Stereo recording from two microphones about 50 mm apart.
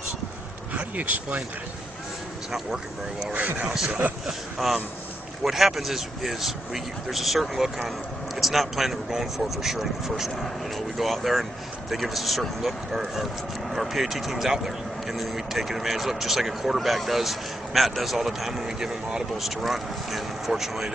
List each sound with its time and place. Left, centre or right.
0.7 s speech: right
3.3 s a man's voice: right
3.7 s speech: centre